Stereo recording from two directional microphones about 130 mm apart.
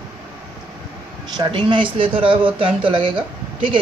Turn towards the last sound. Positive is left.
turn(degrees=-40)  # may be behind; listen again after turning